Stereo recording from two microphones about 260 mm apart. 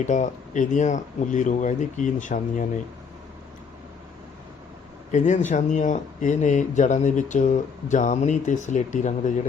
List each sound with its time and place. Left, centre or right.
0.0 s speech: left
5.1 s speech: left